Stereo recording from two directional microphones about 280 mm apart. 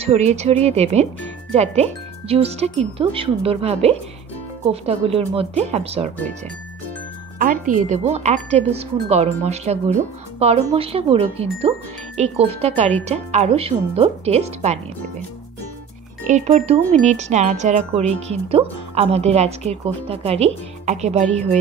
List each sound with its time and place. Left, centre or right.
0.0 s speech: right
7.3 s speech: right
16.3 s speech: right